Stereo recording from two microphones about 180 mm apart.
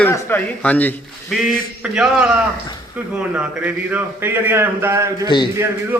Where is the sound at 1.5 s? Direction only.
5° right (ahead or behind).